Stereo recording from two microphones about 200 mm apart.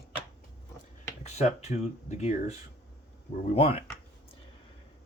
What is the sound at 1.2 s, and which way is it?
Speech, 35° left (ahead or behind).